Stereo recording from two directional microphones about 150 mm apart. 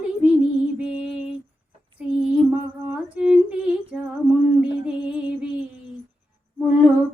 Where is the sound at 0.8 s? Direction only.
5° right (ahead or behind).